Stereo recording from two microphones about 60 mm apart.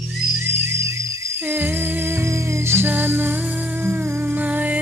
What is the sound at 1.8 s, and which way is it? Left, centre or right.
Music, right.